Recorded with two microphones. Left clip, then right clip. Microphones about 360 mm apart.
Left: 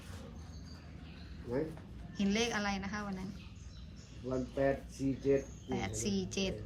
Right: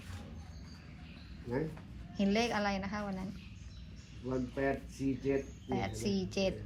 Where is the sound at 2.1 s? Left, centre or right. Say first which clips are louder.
Right 2 dB; centre.